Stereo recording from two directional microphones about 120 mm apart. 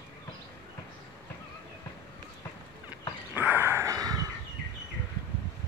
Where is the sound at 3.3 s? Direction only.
15° right (ahead or behind); by 4.3 s 30° right (ahead or behind).